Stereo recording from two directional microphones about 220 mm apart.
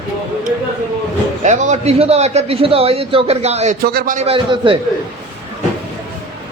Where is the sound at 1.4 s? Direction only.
30° right (ahead or behind).